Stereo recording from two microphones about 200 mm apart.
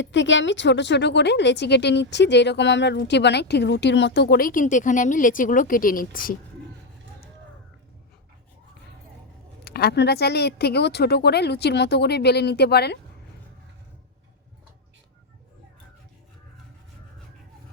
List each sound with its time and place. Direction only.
0.0 s a woman's voice: 65° left (ahead or behind); by 6.3 s 45° left (ahead or behind)
9.6 s a woman's voice: 50° left (ahead or behind)